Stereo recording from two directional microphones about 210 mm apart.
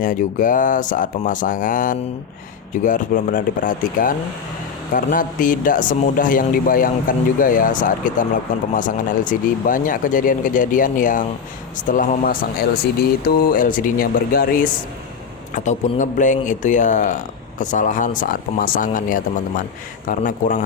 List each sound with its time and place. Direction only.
0.0 s speech: 40° left (ahead or behind)